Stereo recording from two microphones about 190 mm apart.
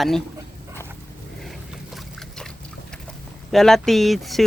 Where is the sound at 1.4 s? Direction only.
Centre (ahead or behind).